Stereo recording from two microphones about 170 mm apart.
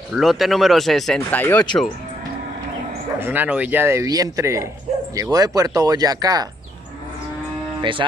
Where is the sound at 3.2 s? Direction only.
10° right (ahead or behind).